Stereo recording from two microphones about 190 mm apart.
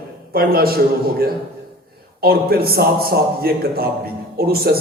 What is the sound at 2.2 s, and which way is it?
A man's voice, 55° right (ahead or behind).